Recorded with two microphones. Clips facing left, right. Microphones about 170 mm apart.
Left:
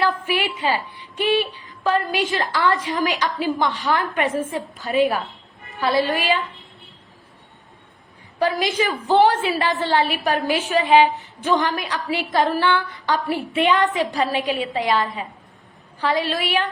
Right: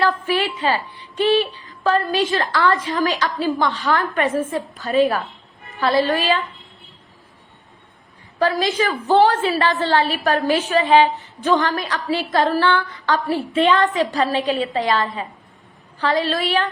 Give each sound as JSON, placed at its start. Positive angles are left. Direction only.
{"t": 0.3, "sound": "a woman's voice", "side_deg": 15}
{"t": 0.7, "sound": "a sound", "side_deg": -40}
{"t": 1.2, "sound": "a woman's voice", "side_deg": 15}
{"t": 8.4, "sound": "a woman's voice", "side_deg": 15}